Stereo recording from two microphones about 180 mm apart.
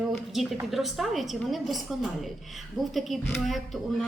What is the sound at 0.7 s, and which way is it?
Speech, centre (ahead or behind).